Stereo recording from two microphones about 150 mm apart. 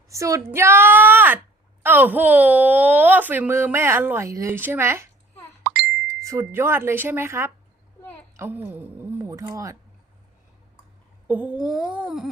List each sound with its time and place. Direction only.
0.1 s a woman's voice: 20° right (ahead or behind)
5.6 s ding: 5° right (ahead or behind)
6.2 s speech: 15° right (ahead or behind)
11.3 s a sound: 10° right (ahead or behind)